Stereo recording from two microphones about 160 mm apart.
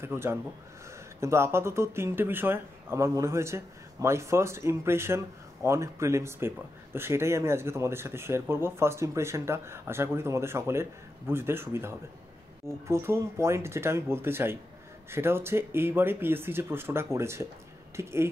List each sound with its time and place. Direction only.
0.0 s speech: 15° right (ahead or behind)